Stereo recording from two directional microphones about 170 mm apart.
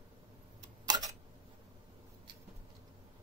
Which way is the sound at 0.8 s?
25° right (ahead or behind).